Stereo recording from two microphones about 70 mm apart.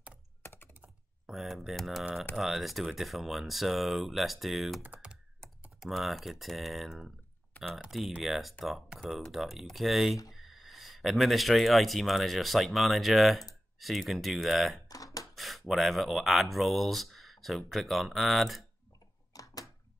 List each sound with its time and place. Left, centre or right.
0.4 s computer keyboard: left
1.2 s speech: centre
7.5 s typing: left
8.2 s speech: centre
19.3 s a sound: left